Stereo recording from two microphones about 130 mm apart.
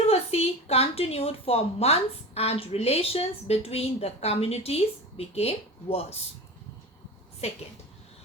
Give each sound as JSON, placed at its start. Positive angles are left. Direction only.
{"t": 0.1, "sound": "a woman's voice", "side_deg": 50}
{"t": 7.4, "sound": "a woman's voice", "side_deg": 55}